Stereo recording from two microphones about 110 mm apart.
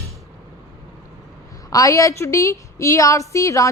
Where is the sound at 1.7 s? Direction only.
30° left (ahead or behind).